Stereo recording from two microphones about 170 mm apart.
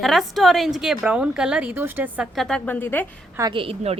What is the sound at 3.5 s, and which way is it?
Speech, 30° right (ahead or behind).